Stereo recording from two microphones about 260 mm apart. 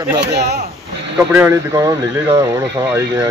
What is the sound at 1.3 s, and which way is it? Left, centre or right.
Speech, centre.